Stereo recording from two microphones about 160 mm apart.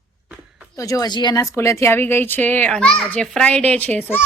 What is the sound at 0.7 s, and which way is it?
A child's voice, 20° left (ahead or behind).